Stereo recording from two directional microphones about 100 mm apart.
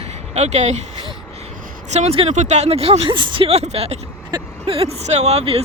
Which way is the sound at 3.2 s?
55° right (ahead or behind).